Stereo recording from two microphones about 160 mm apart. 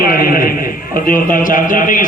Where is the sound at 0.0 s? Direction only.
65° left (ahead or behind).